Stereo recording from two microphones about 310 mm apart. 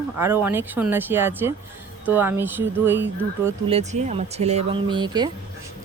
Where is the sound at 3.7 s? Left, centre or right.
Centre.